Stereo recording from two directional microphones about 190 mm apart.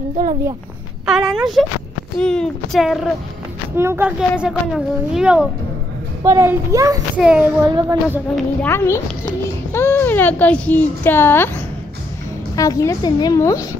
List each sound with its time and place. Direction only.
1.0 s speech: centre (ahead or behind)
3.7 s a child's voice: 10° right (ahead or behind)
7.2 s speech: 5° right (ahead or behind)
7.7 s a child's voice: 15° right (ahead or behind)
8.6 s a woman's voice: 15° left (ahead or behind)